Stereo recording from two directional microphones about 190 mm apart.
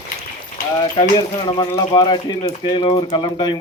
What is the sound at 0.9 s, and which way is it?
Speech, 30° left (ahead or behind).